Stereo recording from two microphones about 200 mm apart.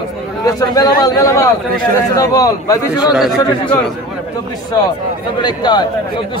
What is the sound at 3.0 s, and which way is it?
Speech, 5° right (ahead or behind).